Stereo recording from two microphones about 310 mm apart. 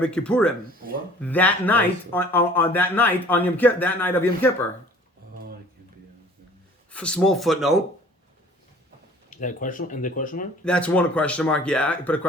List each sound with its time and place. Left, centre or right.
0.0 s speech: centre
6.9 s speech: centre
9.3 s speech: left
10.6 s speech: centre